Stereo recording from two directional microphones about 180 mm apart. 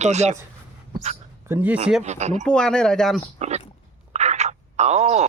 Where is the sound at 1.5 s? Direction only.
10° right (ahead or behind).